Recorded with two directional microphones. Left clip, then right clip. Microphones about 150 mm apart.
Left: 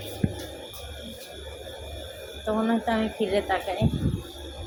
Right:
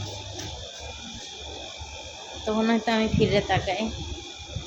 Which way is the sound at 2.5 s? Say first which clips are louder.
Right 1 dB; 30° right (ahead or behind).